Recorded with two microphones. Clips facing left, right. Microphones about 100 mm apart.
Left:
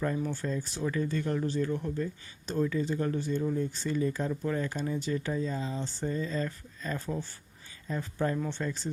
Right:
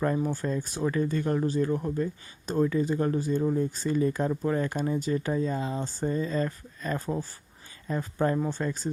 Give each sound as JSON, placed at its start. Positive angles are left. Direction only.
{"t": 0.0, "sound": "speech", "side_deg": -45}
{"t": 4.1, "sound": "speech", "side_deg": -50}